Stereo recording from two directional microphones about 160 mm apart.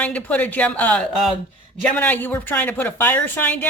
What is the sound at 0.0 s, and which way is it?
Speech, 10° left (ahead or behind).